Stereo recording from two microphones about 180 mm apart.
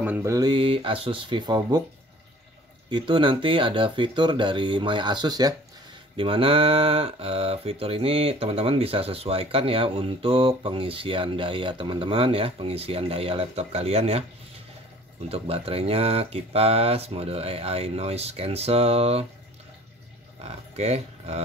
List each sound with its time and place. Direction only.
0.0 s speech: 15° right (ahead or behind)
2.9 s speech: 25° right (ahead or behind)
15.2 s speech: 35° right (ahead or behind)
20.4 s speech: 35° right (ahead or behind)